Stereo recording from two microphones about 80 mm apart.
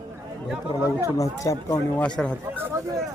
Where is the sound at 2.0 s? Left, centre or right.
Centre.